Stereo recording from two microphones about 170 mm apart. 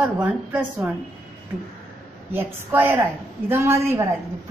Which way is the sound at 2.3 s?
15° right (ahead or behind).